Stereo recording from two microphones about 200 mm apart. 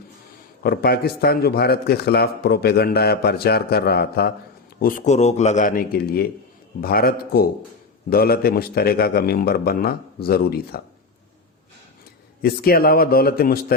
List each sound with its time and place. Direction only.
0.6 s a man's voice: 50° left (ahead or behind)
4.8 s a man's voice: 40° left (ahead or behind)
12.4 s a man's voice: 50° left (ahead or behind)